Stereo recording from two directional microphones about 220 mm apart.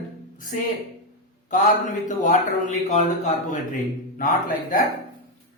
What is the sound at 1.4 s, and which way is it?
A man's voice, 35° left (ahead or behind).